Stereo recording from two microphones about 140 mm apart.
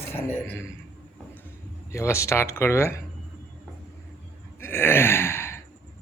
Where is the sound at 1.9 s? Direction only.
20° left (ahead or behind).